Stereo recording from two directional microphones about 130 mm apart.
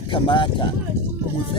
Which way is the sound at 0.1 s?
40° left (ahead or behind).